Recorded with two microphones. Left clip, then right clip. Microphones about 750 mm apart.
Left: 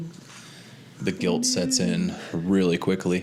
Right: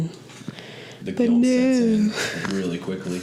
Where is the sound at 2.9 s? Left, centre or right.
Left.